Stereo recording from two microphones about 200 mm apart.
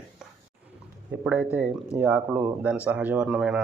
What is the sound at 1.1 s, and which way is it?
Speech, 10° right (ahead or behind).